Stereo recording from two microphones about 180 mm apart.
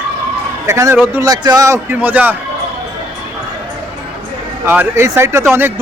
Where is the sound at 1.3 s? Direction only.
20° right (ahead or behind).